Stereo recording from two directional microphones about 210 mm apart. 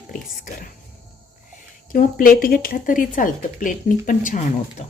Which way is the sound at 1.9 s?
40° left (ahead or behind).